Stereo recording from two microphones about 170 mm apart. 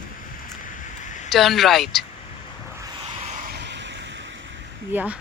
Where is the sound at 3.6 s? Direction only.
90° right.